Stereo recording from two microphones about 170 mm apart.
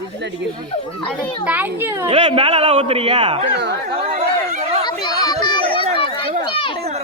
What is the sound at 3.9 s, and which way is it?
Chatter, 35° right (ahead or behind).